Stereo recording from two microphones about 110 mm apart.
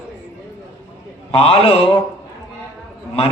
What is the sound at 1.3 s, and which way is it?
Speech, 60° left (ahead or behind).